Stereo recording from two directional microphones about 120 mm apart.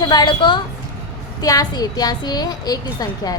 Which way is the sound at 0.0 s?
35° left (ahead or behind).